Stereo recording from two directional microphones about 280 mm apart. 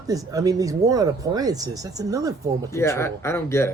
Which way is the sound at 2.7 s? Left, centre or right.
Centre.